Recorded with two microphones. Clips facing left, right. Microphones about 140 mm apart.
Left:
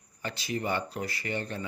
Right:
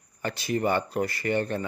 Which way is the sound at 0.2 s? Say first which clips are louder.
Right 6 dB; 55° right (ahead or behind).